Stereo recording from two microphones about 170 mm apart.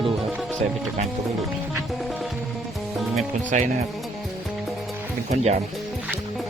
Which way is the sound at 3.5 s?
45° right (ahead or behind).